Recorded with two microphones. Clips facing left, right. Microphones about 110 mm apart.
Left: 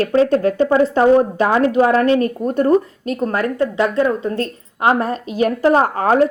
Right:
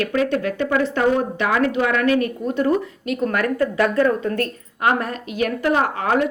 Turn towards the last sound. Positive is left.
turn(degrees=35)  # may be behind; listen again after turning